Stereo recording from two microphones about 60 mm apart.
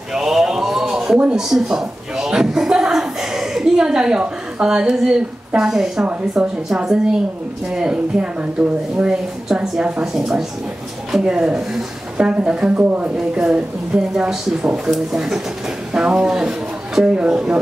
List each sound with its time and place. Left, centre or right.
0.1 s a sound: centre
1.3 s a woman's voice: centre; by 13.6 s right
14.1 s a woman's voice: centre
14.9 s speech: centre
15.9 s speech: centre